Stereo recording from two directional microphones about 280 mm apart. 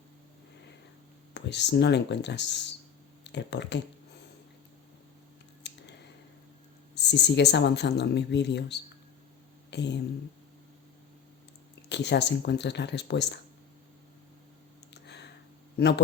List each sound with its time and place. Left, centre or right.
1.3 s speech: left
5.6 s scissors: left
6.9 s speech: left
9.6 s a sound: left
11.9 s speech: left
15.0 s a sound: left